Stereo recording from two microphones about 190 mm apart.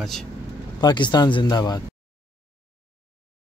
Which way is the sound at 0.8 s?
20° left (ahead or behind).